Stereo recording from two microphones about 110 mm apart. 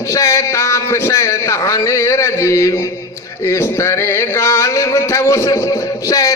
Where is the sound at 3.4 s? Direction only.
25° left (ahead or behind).